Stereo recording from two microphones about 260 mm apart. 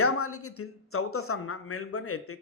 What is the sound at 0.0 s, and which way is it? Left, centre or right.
A man's voice, left.